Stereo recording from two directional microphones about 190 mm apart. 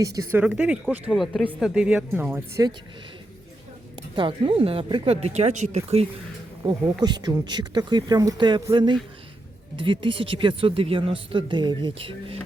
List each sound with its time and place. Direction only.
0.0 s speech: 15° right (ahead or behind)
4.1 s speech: 25° right (ahead or behind)
7.0 s speech: 20° right (ahead or behind)